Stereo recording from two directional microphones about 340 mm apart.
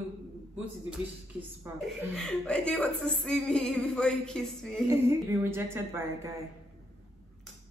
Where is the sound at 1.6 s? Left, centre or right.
Centre.